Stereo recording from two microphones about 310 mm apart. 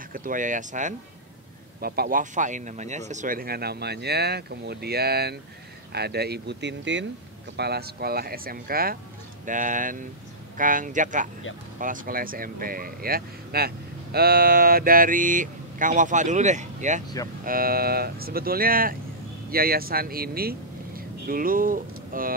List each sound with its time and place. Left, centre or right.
0.1 s speech: right